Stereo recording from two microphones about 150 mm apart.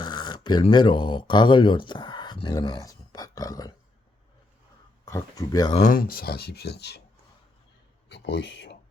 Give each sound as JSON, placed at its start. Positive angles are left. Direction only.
{"t": 0.0, "sound": "speech", "side_deg": 30}
{"t": 5.0, "sound": "speech", "side_deg": 20}
{"t": 5.7, "sound": "speech", "side_deg": 65}